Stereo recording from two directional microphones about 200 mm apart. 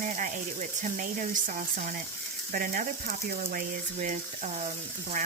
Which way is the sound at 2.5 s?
45° right (ahead or behind).